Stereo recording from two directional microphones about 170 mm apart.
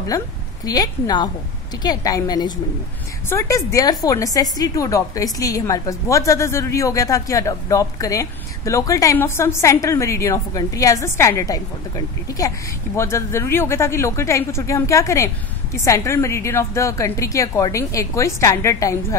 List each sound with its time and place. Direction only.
0.7 s a woman's voice: 20° left (ahead or behind)